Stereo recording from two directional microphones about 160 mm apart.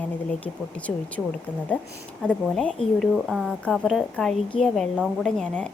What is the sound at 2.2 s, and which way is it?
A woman's voice, 5° left (ahead or behind).